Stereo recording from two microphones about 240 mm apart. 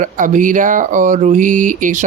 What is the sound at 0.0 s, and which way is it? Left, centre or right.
Speech, right.